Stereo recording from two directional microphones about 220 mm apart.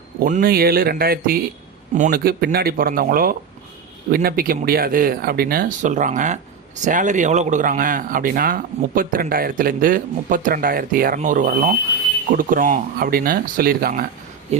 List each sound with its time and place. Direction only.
0.2 s speech: 40° right (ahead or behind)
14.5 s speech: 30° right (ahead or behind)